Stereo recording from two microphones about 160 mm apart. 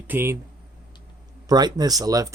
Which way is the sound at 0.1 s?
15° right (ahead or behind).